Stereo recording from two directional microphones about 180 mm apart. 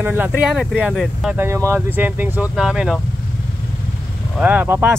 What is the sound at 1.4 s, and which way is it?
Speech, 15° right (ahead or behind).